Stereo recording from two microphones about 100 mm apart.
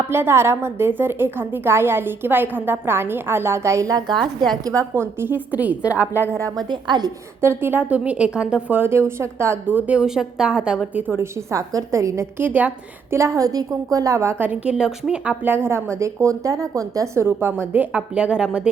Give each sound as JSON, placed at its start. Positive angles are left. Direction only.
{"t": 0.1, "sound": "a woman's voice", "side_deg": -25}
{"t": 4.6, "sound": "a woman's voice", "side_deg": -30}
{"t": 5.2, "sound": "a woman's voice", "side_deg": -15}
{"t": 6.6, "sound": "a woman's voice", "side_deg": -45}
{"t": 7.4, "sound": "a woman's voice", "side_deg": -25}
{"t": 13.1, "sound": "a woman's voice", "side_deg": -30}
{"t": 15.5, "sound": "a woman's voice", "side_deg": -25}